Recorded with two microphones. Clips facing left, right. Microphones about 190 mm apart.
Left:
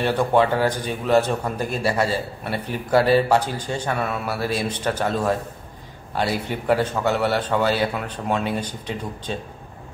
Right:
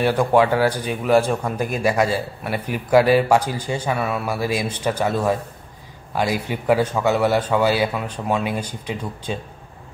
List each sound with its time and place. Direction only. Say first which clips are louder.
0.0 s speech: right 2 dB; 10° right (ahead or behind)